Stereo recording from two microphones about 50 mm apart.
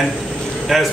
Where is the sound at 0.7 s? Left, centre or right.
Centre.